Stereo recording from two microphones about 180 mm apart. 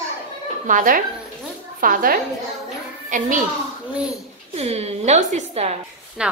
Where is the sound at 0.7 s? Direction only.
50° right (ahead or behind).